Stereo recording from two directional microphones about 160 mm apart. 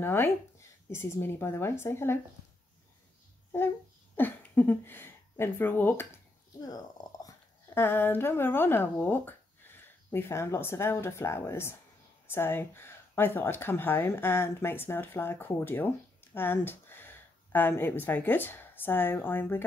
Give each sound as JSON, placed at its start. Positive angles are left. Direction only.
{"t": 0.0, "sound": "speech", "side_deg": 15}
{"t": 4.2, "sound": "speech", "side_deg": 10}
{"t": 6.6, "sound": "speech", "side_deg": 25}